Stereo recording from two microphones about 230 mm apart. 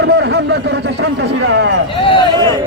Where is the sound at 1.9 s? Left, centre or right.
Left.